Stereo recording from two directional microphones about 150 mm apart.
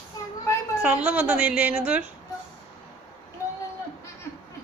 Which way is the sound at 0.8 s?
10° right (ahead or behind).